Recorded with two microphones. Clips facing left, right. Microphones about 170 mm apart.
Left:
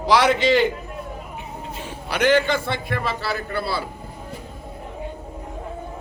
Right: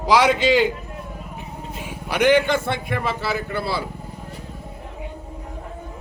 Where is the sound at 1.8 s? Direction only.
15° right (ahead or behind).